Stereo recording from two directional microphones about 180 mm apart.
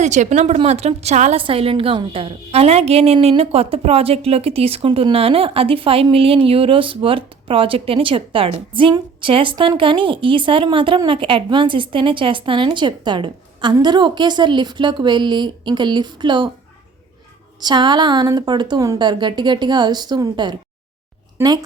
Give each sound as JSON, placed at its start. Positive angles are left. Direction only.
{"t": 0.0, "sound": "a woman's voice", "side_deg": -40}
{"t": 17.6, "sound": "a woman's voice", "side_deg": -25}